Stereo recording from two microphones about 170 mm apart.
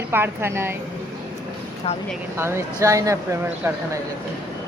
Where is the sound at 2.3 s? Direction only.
15° right (ahead or behind).